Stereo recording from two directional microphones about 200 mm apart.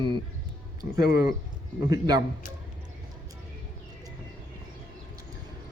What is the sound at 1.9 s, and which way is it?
Speech, 20° right (ahead or behind).